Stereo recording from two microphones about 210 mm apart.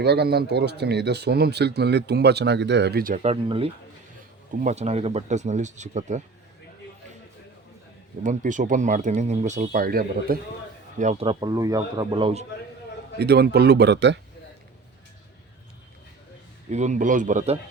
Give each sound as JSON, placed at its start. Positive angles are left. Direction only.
{"t": 0.0, "sound": "speech", "side_deg": -50}
{"t": 4.6, "sound": "speech", "side_deg": -30}
{"t": 8.2, "sound": "speech", "side_deg": -35}
{"t": 11.3, "sound": "speech", "side_deg": -20}
{"t": 13.1, "sound": "speech", "side_deg": -50}
{"t": 16.7, "sound": "speech", "side_deg": -35}